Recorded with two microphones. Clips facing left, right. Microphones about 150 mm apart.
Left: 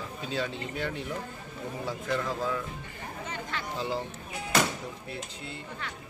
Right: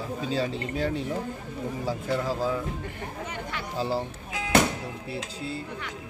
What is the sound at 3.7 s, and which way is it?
Speech, 35° right (ahead or behind).